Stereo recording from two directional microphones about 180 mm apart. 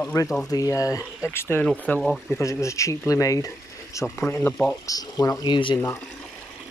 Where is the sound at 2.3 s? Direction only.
15° left (ahead or behind).